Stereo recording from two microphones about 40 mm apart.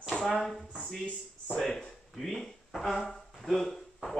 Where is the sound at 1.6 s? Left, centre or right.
Centre.